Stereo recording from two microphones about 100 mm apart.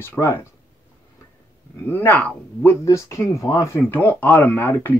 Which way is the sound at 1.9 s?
15° left (ahead or behind).